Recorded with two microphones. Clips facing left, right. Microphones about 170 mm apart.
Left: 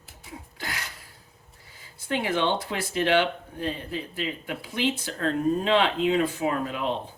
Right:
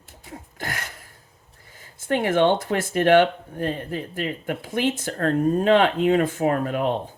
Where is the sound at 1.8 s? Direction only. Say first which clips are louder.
Right 5 dB; 50° right (ahead or behind).